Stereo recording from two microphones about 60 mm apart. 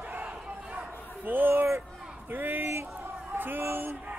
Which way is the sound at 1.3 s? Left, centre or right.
Right.